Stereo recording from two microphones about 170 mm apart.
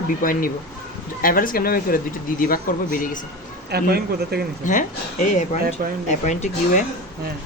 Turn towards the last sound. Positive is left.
turn(degrees=45)  # may be behind; listen again after turning